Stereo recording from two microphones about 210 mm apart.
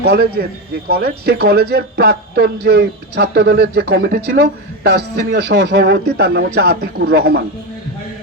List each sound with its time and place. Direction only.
0.0 s speech: 50° right (ahead or behind)